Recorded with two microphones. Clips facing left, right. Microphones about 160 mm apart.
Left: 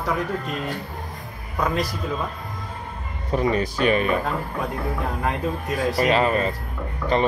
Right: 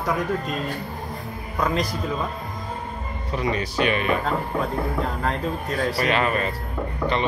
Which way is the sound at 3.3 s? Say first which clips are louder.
Left 4 dB; 45° left (ahead or behind).